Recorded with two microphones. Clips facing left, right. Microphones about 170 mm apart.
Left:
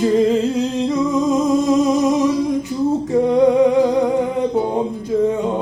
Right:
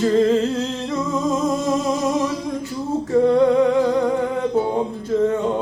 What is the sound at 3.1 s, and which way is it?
Music, 15° left (ahead or behind).